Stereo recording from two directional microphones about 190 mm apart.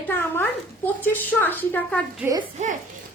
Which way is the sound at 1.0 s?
10° left (ahead or behind).